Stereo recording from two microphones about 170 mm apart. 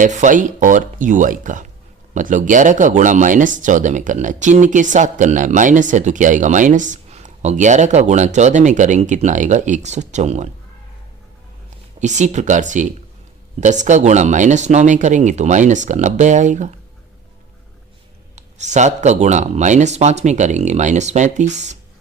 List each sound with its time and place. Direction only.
0.0 s speech: 50° right (ahead or behind)
11.9 s speech: 45° right (ahead or behind)
18.3 s speech: 45° right (ahead or behind)